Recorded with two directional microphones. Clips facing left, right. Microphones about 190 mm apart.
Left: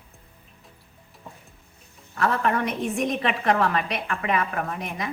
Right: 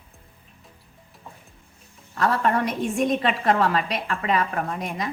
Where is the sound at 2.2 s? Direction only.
35° right (ahead or behind).